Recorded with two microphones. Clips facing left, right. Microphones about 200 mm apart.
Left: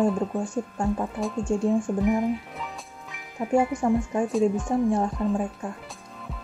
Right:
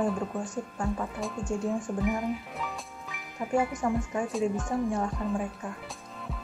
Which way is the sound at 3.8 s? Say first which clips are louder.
Left 5 dB; 30° left (ahead or behind).